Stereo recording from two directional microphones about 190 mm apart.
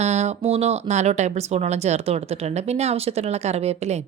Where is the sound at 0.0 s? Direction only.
35° right (ahead or behind).